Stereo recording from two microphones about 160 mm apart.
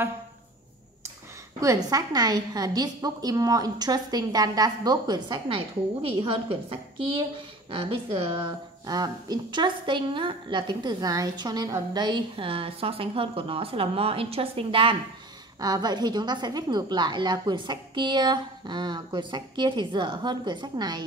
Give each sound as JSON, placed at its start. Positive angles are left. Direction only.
{"t": 1.6, "sound": "a woman's voice", "side_deg": -20}